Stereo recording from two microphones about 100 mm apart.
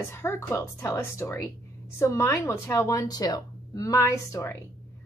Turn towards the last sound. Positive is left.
turn(degrees=30)  # may be behind; listen again after turning